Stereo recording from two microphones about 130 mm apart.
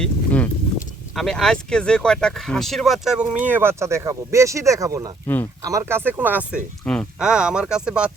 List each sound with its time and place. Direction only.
0.0 s speech: 10° left (ahead or behind)
3.4 s speech: 15° right (ahead or behind)
6.8 s speech: 5° left (ahead or behind)
7.2 s speech: 5° right (ahead or behind)